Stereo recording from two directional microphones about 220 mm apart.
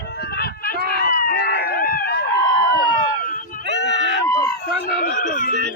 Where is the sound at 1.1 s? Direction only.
40° left (ahead or behind).